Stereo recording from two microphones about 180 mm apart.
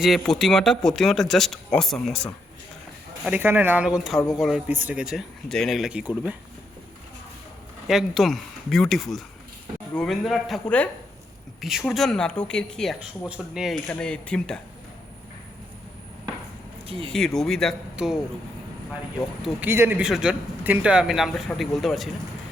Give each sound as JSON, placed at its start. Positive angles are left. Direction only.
{"t": 0.0, "sound": "speech", "side_deg": 0}
{"t": 3.2, "sound": "speech", "side_deg": -10}
{"t": 7.9, "sound": "speech", "side_deg": 0}
{"t": 16.8, "sound": "speech", "side_deg": -30}
{"t": 17.1, "sound": "speech", "side_deg": 5}
{"t": 19.4, "sound": "speech", "side_deg": -10}